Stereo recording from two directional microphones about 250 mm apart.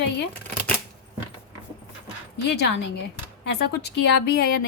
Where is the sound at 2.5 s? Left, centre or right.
Left.